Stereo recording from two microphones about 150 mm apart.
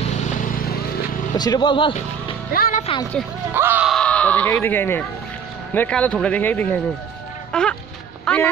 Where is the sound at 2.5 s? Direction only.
70° left (ahead or behind).